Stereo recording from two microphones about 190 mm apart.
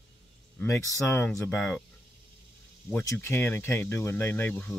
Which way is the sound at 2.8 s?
15° left (ahead or behind).